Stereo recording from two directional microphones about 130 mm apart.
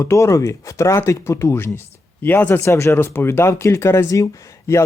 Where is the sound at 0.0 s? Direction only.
25° left (ahead or behind).